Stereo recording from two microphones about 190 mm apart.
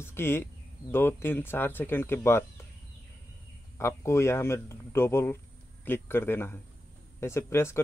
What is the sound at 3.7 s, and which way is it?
Speech, 15° left (ahead or behind).